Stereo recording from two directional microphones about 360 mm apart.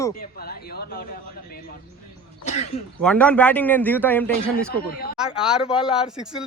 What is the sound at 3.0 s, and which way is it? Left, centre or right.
Speech, centre.